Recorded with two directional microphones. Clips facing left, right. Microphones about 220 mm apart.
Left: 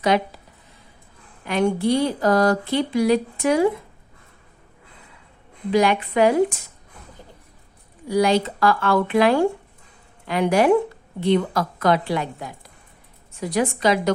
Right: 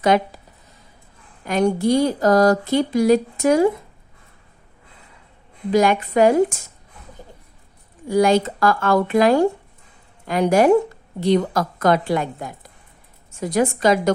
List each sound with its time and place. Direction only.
0.0 s speech: 50° right (ahead or behind)
1.5 s speech: 45° right (ahead or behind)
5.7 s speech: 45° right (ahead or behind)
8.0 s speech: 50° right (ahead or behind)